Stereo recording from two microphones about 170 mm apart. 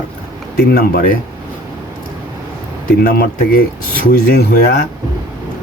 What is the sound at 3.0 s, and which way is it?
Speech, 65° left (ahead or behind).